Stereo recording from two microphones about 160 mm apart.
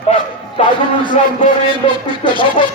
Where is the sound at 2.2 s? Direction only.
30° left (ahead or behind).